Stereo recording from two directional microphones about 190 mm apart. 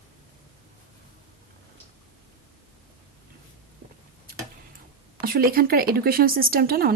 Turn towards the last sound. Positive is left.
turn(degrees=-55)  # may be behind; listen again after turning